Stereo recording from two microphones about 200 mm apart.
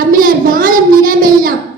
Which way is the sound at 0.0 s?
45° right (ahead or behind).